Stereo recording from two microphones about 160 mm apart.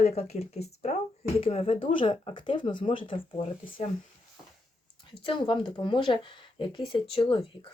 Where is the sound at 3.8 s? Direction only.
45° left (ahead or behind).